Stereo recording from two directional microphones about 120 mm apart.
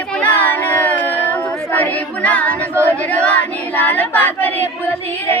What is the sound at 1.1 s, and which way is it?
Music, 15° left (ahead or behind).